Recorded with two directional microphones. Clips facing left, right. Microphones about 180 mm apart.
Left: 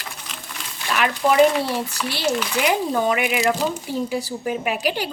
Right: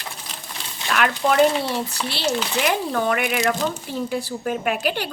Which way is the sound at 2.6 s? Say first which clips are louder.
Left 2 dB; 15° left (ahead or behind).